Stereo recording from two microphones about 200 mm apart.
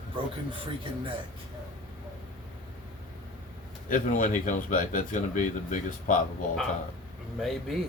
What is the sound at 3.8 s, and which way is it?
Speech, 40° left (ahead or behind).